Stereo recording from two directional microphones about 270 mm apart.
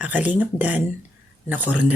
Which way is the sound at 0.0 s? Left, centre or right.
Centre.